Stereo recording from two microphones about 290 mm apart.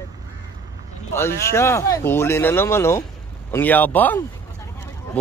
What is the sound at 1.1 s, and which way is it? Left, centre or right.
Speech, centre.